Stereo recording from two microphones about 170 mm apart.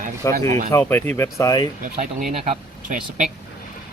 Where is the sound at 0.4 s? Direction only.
40° right (ahead or behind).